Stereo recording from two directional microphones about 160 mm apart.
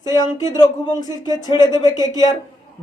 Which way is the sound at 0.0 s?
25° left (ahead or behind).